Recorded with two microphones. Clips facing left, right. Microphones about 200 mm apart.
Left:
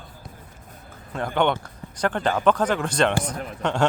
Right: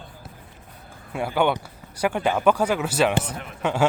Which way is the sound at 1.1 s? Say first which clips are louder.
Even; 10° right (ahead or behind).